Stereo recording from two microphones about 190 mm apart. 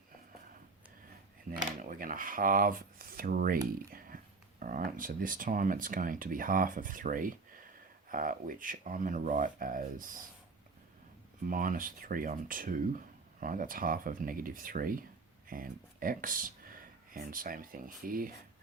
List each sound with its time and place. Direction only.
1.5 s speech: 45° right (ahead or behind)
3.9 s a sound: 50° right (ahead or behind)
4.6 s speech: 45° right (ahead or behind)
11.4 s speech: 45° right (ahead or behind)